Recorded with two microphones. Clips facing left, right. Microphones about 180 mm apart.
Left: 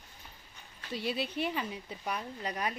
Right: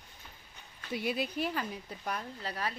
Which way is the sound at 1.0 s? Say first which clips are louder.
Right 1 dB; 55° right (ahead or behind).